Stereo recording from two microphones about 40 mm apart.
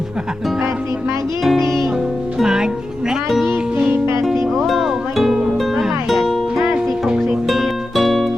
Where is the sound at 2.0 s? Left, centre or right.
Centre.